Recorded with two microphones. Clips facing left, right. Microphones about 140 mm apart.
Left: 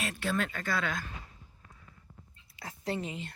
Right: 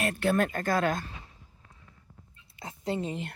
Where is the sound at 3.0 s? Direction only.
55° right (ahead or behind).